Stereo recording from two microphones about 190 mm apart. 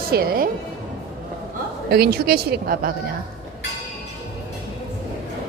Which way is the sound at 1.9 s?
55° right (ahead or behind).